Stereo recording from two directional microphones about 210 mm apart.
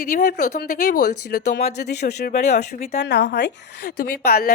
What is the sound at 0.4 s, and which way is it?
A woman's voice, 35° left (ahead or behind).